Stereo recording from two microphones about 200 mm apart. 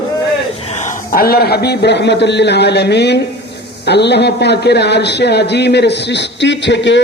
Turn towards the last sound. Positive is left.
turn(degrees=65)  # may be behind; listen again after turning